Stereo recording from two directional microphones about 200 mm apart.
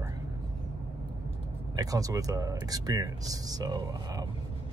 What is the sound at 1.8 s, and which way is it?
Speech, 15° right (ahead or behind).